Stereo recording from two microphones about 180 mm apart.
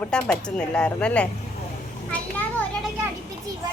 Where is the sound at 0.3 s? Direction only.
5° left (ahead or behind).